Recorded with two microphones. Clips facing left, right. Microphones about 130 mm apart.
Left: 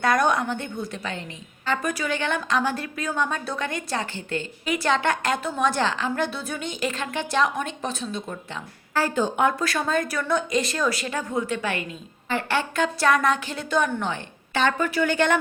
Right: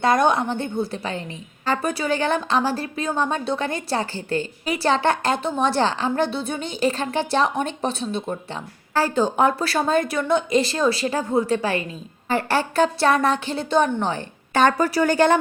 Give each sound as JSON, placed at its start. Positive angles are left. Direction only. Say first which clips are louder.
{"t": 0.0, "sound": "a woman's voice", "louder": "right 3 dB", "side_deg": -25}